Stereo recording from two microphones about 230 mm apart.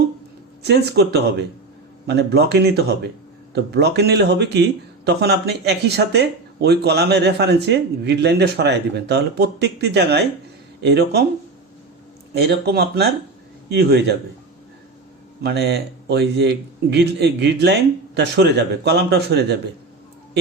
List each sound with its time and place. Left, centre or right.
0.6 s speech: right
12.3 s speech: right
15.4 s speech: right